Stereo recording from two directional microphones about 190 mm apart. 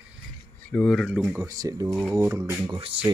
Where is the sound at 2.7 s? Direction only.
25° right (ahead or behind).